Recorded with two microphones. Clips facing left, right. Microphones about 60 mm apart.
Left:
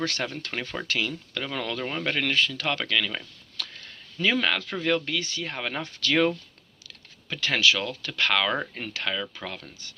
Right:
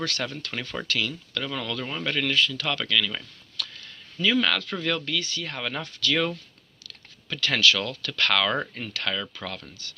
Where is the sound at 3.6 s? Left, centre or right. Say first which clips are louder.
Right 1 dB; left.